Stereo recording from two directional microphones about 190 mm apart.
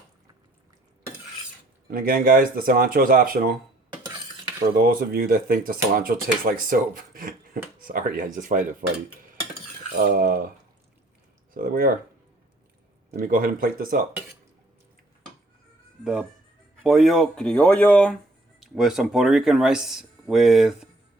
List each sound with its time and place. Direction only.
1.9 s speech: 50° right (ahead or behind)
4.7 s speech: 50° right (ahead or behind)
11.5 s speech: 50° right (ahead or behind)
13.1 s speech: 45° right (ahead or behind)
16.8 s speech: centre (ahead or behind)